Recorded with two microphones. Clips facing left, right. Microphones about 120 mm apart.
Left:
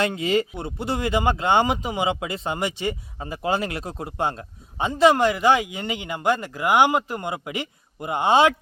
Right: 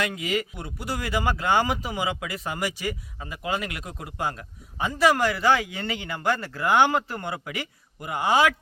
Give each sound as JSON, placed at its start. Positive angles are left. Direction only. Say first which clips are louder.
{"t": 0.0, "sound": "speech", "louder": "left 5 dB", "side_deg": 30}